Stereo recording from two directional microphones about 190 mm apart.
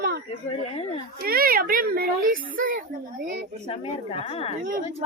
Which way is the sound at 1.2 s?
50° right (ahead or behind).